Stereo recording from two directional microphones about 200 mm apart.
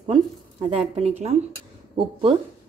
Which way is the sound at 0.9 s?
35° right (ahead or behind).